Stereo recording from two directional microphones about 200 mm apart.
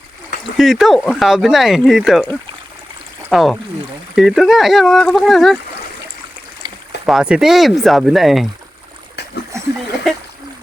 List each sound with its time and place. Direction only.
0.5 s speech: centre (ahead or behind)
3.2 s speech: centre (ahead or behind)
6.6 s boat: 25° right (ahead or behind)
7.0 s speech: 5° right (ahead or behind)